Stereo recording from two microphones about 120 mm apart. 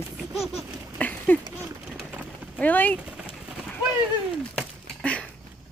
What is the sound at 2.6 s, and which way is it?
Speech, 15° left (ahead or behind).